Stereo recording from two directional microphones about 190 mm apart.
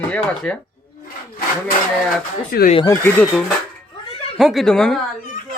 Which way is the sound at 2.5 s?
55° left (ahead or behind).